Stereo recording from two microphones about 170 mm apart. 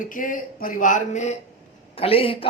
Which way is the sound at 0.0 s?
50° left (ahead or behind).